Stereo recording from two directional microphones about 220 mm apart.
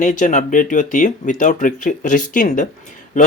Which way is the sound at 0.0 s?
35° left (ahead or behind).